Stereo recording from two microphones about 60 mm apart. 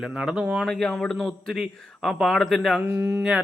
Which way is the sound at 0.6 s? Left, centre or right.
Centre.